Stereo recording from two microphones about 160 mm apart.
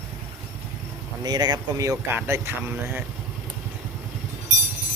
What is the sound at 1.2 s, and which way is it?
Speech, 25° right (ahead or behind).